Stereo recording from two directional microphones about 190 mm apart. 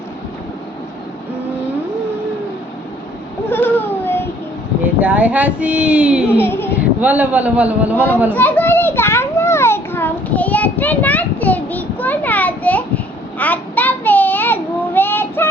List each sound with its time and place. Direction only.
3.5 s a sound: 10° left (ahead or behind)
4.9 s speech: 10° right (ahead or behind)
6.4 s a sound: 10° left (ahead or behind)
7.0 s speech: 10° right (ahead or behind)
8.3 s children playing: 10° left (ahead or behind)
13.4 s child singing: 10° left (ahead or behind)